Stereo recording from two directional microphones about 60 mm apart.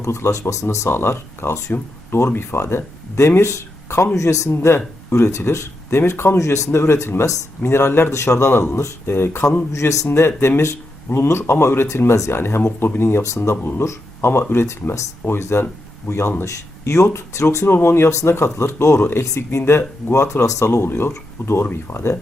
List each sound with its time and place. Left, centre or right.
0.0 s speech: left
0.9 s speech: left
4.5 s speech: left
6.7 s speech: left
8.1 s speech: left
13.2 s speech: left
13.6 s speech: left
16.4 s speech: left
17.7 s speech: left
20.7 s speech: left